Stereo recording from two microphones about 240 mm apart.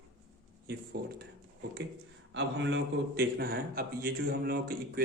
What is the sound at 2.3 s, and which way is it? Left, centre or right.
A man's voice, right.